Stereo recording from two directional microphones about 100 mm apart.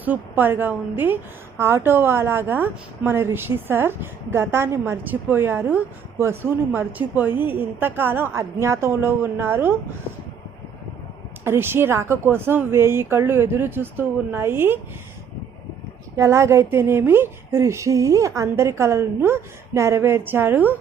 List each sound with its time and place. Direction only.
0.0 s a woman's voice: 20° right (ahead or behind)
11.4 s a woman's voice: 25° right (ahead or behind)
16.1 s a woman's voice: 30° right (ahead or behind)